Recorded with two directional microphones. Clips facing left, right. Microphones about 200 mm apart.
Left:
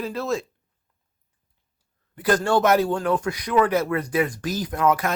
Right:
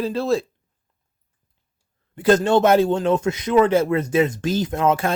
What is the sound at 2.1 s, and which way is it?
A man's voice, 25° right (ahead or behind).